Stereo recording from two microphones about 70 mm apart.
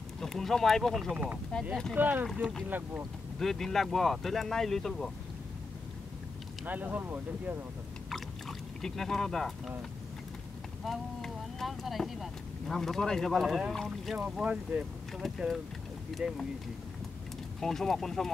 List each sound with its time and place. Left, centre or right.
0.2 s speech: centre
1.1 s speech: right
3.3 s speech: centre
6.6 s speech: right
8.1 s rowboat: centre
10.9 s speech: centre
14.4 s speech: centre
15.1 s speech: centre
17.6 s speech: centre